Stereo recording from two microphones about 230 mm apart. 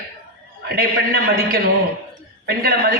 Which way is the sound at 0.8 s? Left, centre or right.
Right.